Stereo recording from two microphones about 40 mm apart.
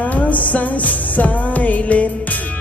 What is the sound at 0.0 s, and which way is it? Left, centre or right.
Music, left.